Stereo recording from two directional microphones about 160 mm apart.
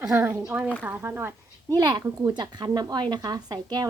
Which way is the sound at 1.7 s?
25° right (ahead or behind).